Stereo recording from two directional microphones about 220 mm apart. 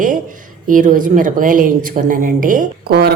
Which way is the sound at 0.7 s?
35° right (ahead or behind).